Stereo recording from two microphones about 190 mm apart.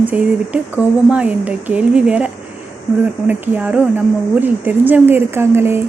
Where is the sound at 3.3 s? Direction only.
10° right (ahead or behind).